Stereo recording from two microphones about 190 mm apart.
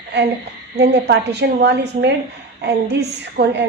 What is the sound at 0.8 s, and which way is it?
A woman's voice, 60° right (ahead or behind).